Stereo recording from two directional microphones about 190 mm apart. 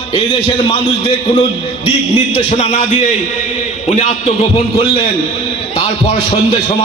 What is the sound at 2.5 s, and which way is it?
A man's voice, 35° left (ahead or behind).